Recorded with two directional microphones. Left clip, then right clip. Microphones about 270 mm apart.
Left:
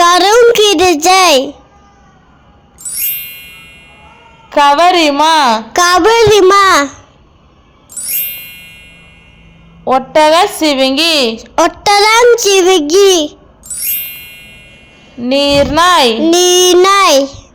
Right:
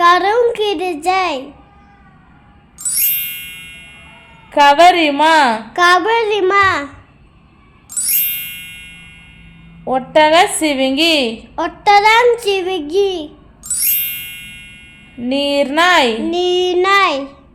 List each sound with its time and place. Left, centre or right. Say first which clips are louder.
0.0 s a sound: left 5 dB; left
2.8 s music: right 1 dB; centre
4.4 s a woman's voice: left 1 dB; centre
5.7 s a child's voice: left 4 dB; left
7.9 s music: right 1 dB; centre
9.8 s a woman's voice: left 4 dB; centre
11.5 s a child's voice: left 2 dB; left
13.7 s jingle: right 1 dB; centre
15.2 s a woman's voice: left 6 dB; centre
16.3 s a child's voice: left 8 dB; left